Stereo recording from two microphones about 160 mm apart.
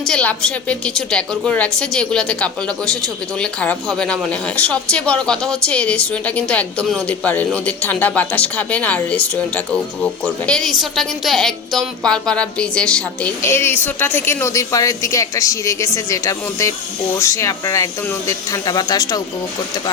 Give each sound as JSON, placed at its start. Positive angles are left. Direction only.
{"t": 0.1, "sound": "a woman's voice", "side_deg": 5}